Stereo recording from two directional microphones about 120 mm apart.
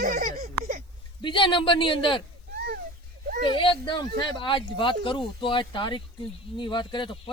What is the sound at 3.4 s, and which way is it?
A man's voice, 45° left (ahead or behind).